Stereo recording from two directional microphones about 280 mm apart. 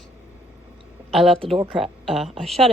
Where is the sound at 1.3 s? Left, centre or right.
Centre.